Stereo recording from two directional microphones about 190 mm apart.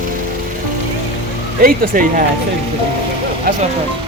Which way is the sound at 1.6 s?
50° right (ahead or behind).